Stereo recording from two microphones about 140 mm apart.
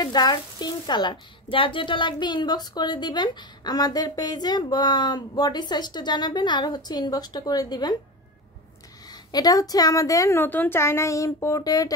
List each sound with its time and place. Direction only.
0.0 s speech: 30° left (ahead or behind)
9.1 s a woman's voice: 30° left (ahead or behind)